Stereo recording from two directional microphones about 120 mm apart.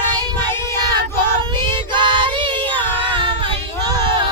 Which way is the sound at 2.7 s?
15° left (ahead or behind).